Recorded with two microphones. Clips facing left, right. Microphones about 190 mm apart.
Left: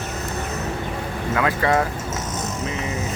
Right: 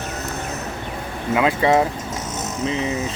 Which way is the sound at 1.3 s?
20° right (ahead or behind).